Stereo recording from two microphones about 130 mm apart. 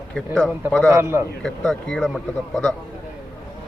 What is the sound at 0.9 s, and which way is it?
Speech, 20° right (ahead or behind).